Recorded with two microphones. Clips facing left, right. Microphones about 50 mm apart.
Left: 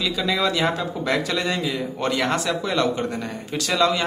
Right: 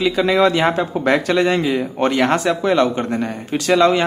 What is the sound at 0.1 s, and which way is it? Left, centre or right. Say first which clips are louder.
Speech: right 7 dB; right.